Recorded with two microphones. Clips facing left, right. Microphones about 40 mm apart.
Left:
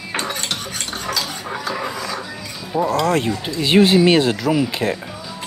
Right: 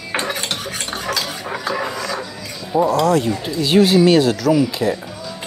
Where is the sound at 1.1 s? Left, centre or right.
Centre.